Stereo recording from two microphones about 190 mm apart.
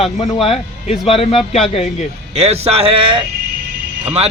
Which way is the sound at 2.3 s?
35° right (ahead or behind).